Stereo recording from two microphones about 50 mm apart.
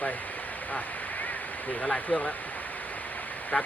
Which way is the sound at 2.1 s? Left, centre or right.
Centre.